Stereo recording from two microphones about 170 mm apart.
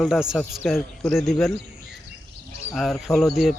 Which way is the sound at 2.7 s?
Centre (ahead or behind).